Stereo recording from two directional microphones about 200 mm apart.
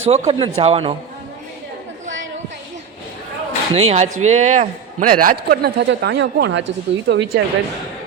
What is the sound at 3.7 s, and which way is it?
Speech, 35° right (ahead or behind).